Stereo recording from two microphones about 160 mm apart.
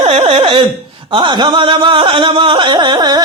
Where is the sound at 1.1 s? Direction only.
30° right (ahead or behind).